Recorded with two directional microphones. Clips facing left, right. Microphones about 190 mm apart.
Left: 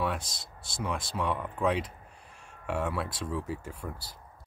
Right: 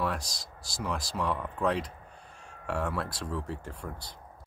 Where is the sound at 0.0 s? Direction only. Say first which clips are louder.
Even; centre (ahead or behind).